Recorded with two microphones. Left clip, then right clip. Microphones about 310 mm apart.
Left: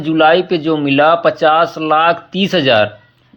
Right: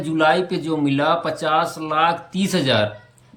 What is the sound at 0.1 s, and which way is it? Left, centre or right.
Speech, centre.